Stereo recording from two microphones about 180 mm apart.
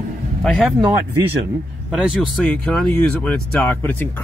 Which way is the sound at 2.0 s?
Centre (ahead or behind).